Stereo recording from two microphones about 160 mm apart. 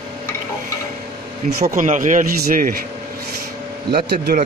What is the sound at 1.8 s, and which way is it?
Speech, 55° right (ahead or behind).